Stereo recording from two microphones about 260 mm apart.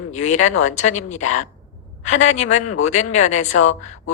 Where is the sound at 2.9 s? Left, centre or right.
Left.